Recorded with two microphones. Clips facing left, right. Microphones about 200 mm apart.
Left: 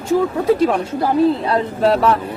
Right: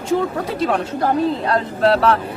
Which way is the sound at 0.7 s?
5° left (ahead or behind).